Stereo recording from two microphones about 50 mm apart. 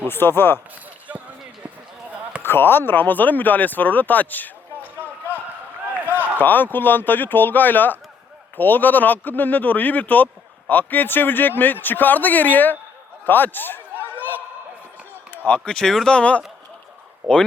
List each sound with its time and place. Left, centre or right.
0.1 s speech: left
2.0 s basketball bounce: right
2.4 s speech: left
6.4 s a man's voice: left
14.0 s a sound: left
15.6 s speech: centre
16.0 s speech: left
17.2 s speech: centre